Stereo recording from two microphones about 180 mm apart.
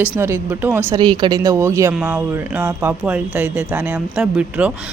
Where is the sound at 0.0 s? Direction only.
10° right (ahead or behind).